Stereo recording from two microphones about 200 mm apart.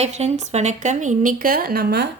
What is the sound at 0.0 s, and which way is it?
Speech, 35° right (ahead or behind).